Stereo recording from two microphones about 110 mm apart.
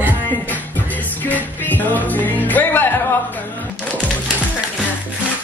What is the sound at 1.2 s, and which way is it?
Music, 15° left (ahead or behind).